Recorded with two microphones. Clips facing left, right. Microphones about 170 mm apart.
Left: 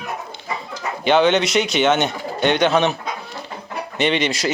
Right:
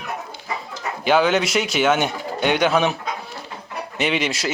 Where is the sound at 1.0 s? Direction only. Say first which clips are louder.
Left 2 dB; 5° right (ahead or behind).